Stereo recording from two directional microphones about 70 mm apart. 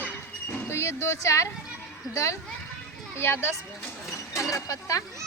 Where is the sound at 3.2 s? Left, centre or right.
Left.